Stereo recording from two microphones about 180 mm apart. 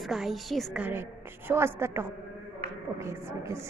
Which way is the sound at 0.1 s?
Centre (ahead or behind).